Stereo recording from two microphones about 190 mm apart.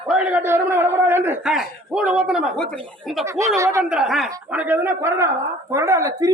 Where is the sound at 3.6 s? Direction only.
15° right (ahead or behind).